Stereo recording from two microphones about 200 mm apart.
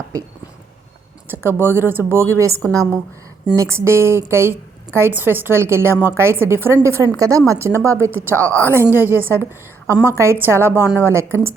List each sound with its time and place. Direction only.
1.3 s a woman's voice: 10° right (ahead or behind)
8.3 s a woman's voice: 10° left (ahead or behind)
8.8 s a woman's voice: 10° right (ahead or behind)